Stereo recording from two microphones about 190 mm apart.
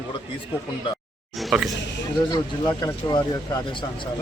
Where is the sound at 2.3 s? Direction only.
20° left (ahead or behind).